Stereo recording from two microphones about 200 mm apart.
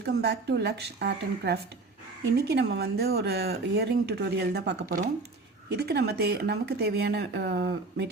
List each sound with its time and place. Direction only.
0.0 s speech: 55° right (ahead or behind)